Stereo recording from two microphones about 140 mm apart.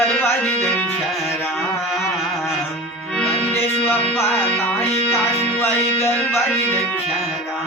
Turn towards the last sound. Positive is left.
turn(degrees=5)  # may be behind; listen again after turning